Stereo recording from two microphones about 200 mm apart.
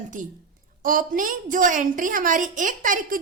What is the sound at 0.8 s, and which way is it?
A woman's voice, 45° right (ahead or behind).